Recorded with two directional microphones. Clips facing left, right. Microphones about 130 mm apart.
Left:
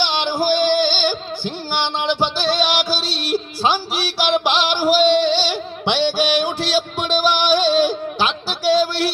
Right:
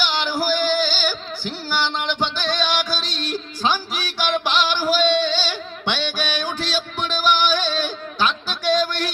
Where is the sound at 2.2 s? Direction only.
10° left (ahead or behind).